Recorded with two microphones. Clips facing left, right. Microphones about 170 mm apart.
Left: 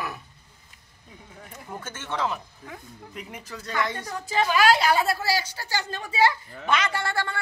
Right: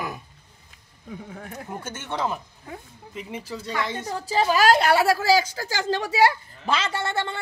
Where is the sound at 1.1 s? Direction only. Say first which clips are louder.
Right 9 dB; 70° right (ahead or behind).